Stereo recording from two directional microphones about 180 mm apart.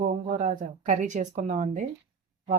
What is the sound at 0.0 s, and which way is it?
Speech, 45° right (ahead or behind).